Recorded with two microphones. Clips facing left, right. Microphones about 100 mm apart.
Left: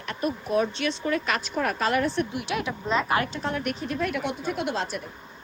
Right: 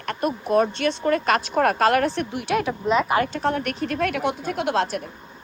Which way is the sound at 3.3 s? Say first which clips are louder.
Right 5 dB; 50° right (ahead or behind).